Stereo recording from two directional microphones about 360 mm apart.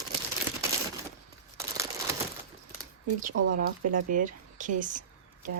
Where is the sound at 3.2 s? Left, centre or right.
Right.